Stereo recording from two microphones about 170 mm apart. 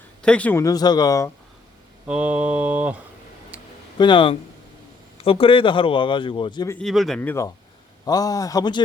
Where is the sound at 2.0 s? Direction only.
5° right (ahead or behind).